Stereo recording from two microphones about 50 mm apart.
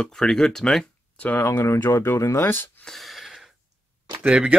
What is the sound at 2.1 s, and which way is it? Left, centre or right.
Speech, left.